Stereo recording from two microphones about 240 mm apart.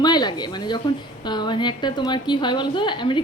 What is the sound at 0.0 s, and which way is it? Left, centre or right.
A woman's voice, centre.